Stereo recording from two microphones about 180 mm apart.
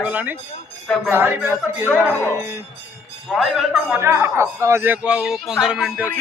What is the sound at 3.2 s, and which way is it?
Speech, centre (ahead or behind).